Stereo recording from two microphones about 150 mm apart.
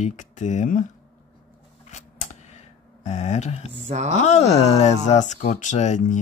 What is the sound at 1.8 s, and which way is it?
Scissors, 50° left (ahead or behind).